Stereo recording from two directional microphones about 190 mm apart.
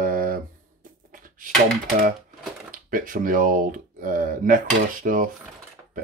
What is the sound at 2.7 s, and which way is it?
Speech, 45° right (ahead or behind).